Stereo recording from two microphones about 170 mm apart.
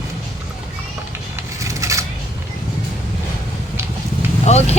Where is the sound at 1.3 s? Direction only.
20° right (ahead or behind).